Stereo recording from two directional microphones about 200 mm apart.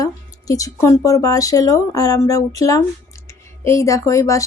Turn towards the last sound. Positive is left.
turn(degrees=15)  # may be behind; listen again after turning